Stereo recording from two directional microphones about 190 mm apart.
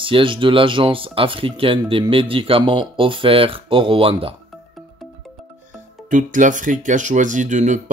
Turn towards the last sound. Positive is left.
turn(degrees=-40)  # may be behind; listen again after turning